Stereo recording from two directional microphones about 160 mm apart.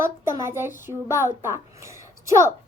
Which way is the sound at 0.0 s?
15° right (ahead or behind).